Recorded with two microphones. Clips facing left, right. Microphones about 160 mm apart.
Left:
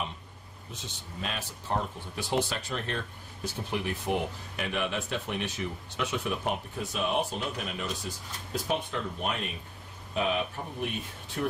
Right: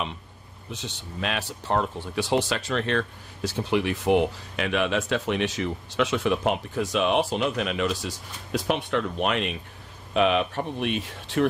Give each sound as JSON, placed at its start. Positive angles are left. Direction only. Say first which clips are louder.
{"t": 0.7, "sound": "speech", "louder": "right 7 dB", "side_deg": -75}